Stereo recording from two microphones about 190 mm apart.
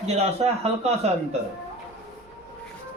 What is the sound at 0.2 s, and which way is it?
Speech, 35° right (ahead or behind).